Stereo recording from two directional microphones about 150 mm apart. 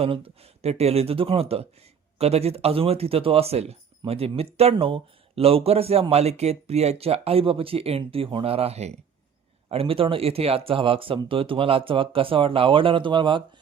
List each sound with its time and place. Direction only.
0.0 s speech: 40° right (ahead or behind)